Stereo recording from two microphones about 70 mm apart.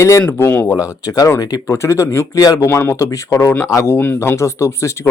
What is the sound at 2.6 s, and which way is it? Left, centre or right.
Speech, left.